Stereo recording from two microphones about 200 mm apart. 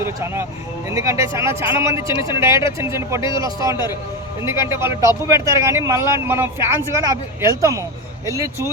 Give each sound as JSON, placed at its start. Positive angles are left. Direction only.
{"t": 0.0, "sound": "speech", "side_deg": -10}